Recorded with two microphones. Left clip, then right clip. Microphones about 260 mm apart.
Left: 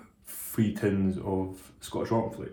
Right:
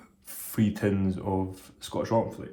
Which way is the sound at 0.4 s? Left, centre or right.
Right.